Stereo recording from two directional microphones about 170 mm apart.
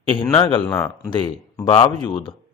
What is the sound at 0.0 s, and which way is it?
Speech, 30° left (ahead or behind).